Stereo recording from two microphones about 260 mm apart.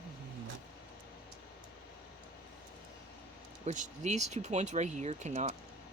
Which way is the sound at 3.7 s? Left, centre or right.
Right.